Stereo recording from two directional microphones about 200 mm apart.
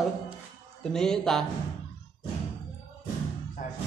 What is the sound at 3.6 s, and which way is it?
Music, 40° left (ahead or behind).